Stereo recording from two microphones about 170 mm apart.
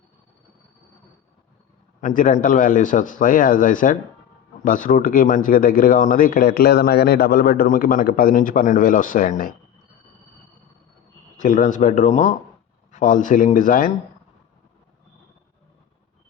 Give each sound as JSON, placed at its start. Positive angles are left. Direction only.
{"t": 2.0, "sound": "speech", "side_deg": 45}
{"t": 11.3, "sound": "speech", "side_deg": 50}